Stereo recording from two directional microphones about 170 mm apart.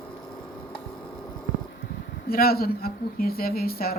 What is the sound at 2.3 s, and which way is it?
Speech, 60° left (ahead or behind).